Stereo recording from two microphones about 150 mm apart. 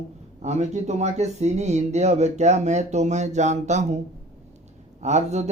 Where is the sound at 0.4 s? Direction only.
50° right (ahead or behind).